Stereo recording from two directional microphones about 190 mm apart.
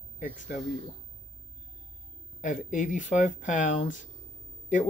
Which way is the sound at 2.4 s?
40° left (ahead or behind).